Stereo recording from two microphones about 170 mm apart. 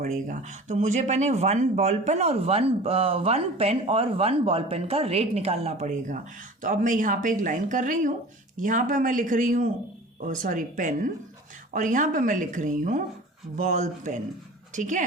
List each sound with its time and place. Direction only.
0.0 s speech: 45° right (ahead or behind)